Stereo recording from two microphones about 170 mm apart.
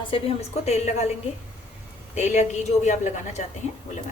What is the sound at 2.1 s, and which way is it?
A woman's voice, 45° left (ahead or behind).